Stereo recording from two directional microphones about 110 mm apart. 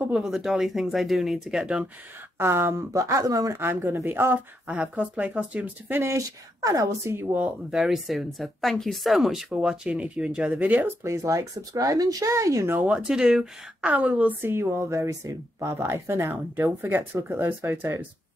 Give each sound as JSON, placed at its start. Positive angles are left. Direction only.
{"t": 0.1, "sound": "speech", "side_deg": -5}
{"t": 2.3, "sound": "a woman's voice", "side_deg": -20}
{"t": 7.7, "sound": "speech", "side_deg": -5}
{"t": 11.1, "sound": "a woman's voice", "side_deg": -30}
{"t": 12.7, "sound": "a woman's voice", "side_deg": -10}